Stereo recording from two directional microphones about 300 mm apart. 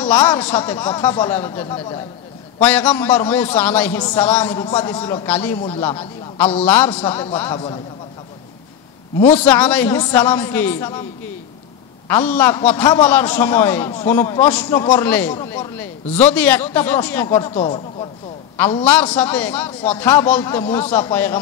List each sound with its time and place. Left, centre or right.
0.0 s a man's voice: centre
5.6 s a man's voice: centre
9.2 s a man's voice: centre
12.1 s a man's voice: centre
18.9 s a man's voice: centre